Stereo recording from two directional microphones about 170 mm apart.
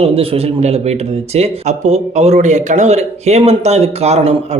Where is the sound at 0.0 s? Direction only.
35° right (ahead or behind).